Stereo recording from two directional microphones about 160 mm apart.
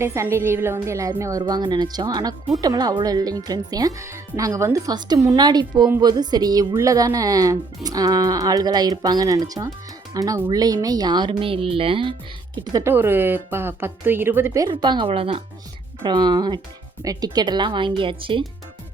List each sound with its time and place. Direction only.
0.0 s a woman's voice: 15° right (ahead or behind); by 12.1 s 35° right (ahead or behind)
12.5 s a woman's voice: 20° right (ahead or behind)